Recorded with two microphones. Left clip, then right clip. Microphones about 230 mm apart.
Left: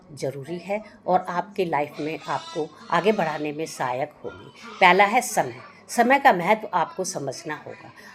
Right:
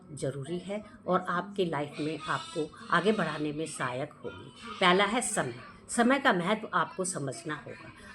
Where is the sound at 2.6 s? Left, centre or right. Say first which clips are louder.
Left 5 dB; left.